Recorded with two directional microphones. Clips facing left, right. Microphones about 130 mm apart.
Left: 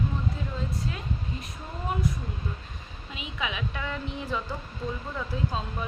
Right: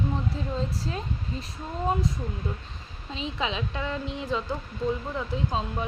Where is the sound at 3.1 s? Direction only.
30° right (ahead or behind).